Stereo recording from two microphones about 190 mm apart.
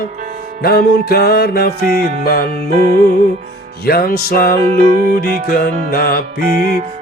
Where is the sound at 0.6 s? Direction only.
55° left (ahead or behind).